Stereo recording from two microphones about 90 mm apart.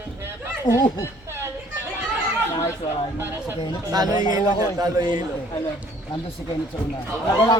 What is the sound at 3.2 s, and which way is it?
Speech, 25° right (ahead or behind).